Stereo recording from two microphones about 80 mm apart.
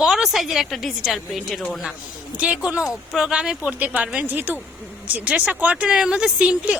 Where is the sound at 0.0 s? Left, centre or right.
Centre.